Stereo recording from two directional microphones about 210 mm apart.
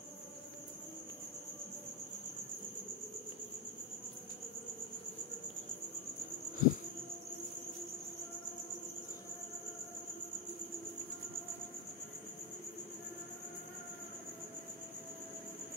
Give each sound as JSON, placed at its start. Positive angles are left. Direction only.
{"t": 6.6, "sound": "insect", "side_deg": 40}